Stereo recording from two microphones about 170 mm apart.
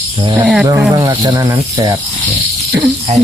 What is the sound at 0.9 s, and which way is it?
Speech, 25° right (ahead or behind).